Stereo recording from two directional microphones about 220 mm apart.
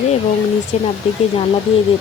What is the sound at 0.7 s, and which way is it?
Speech, 30° left (ahead or behind).